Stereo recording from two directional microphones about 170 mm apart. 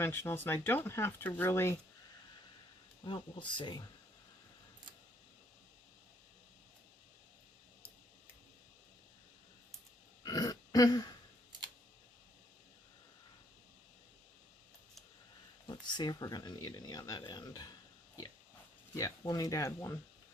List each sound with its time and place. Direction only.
0.0 s speech: 15° left (ahead or behind)
3.0 s speech: 25° left (ahead or behind)
10.2 s throat clearing: 20° left (ahead or behind)
15.6 s speech: 25° left (ahead or behind)
18.9 s speech: 20° left (ahead or behind)